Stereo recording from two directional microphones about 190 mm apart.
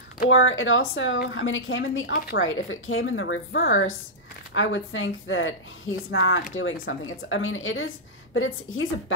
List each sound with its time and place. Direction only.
0.3 s a woman's voice: 90° left